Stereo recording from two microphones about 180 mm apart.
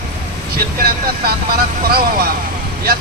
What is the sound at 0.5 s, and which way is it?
Speech, 55° right (ahead or behind).